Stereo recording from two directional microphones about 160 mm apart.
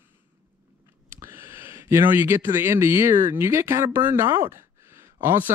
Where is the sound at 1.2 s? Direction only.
15° right (ahead or behind).